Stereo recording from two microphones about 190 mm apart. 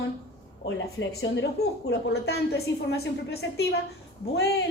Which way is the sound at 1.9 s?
60° left (ahead or behind).